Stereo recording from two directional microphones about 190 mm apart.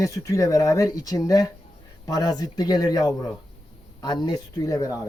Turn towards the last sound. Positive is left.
turn(degrees=15)  # may be behind; listen again after turning